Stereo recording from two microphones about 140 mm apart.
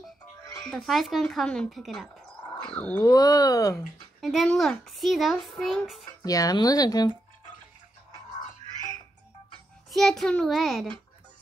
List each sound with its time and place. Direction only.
0.7 s speech: centre (ahead or behind)
3.0 s speech: 25° left (ahead or behind)
4.2 s speech: centre (ahead or behind)
6.2 s speech: 25° left (ahead or behind)
9.8 s speech: centre (ahead or behind)